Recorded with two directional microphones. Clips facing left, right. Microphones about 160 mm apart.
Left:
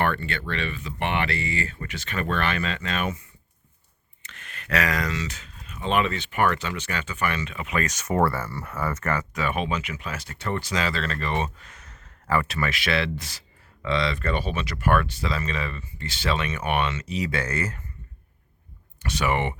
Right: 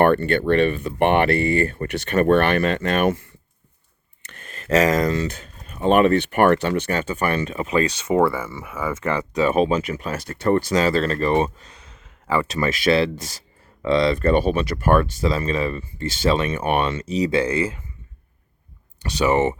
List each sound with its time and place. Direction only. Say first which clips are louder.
0.0 s speech: right 10 dB; 55° right (ahead or behind)
4.6 s speech: right 8 dB; 40° right (ahead or behind)
8.3 s speech: right 3 dB; 15° right (ahead or behind)
9.0 s speech: right 6 dB; 25° right (ahead or behind)
19.0 s speech: right 7 dB; 35° right (ahead or behind)